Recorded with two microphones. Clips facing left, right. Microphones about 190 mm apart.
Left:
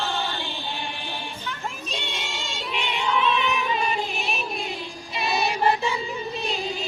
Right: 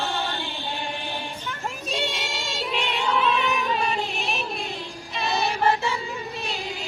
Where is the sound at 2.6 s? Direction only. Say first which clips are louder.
Right 1 dB; centre (ahead or behind).